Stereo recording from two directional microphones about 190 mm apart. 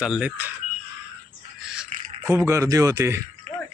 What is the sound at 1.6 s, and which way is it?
Bird, 5° right (ahead or behind).